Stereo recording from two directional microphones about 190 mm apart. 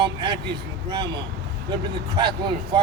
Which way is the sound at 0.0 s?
25° right (ahead or behind).